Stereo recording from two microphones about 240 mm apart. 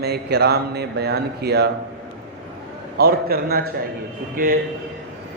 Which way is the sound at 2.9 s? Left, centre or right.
Right.